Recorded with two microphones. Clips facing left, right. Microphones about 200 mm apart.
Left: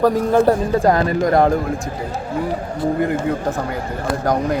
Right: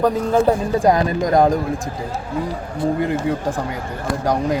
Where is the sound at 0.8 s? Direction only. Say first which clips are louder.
Left 1 dB; 15° right (ahead or behind).